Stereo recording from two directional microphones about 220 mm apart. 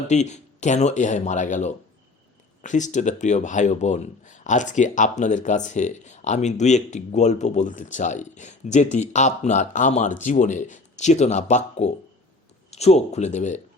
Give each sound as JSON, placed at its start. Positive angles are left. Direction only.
{"t": 0.1, "sound": "speech", "side_deg": 30}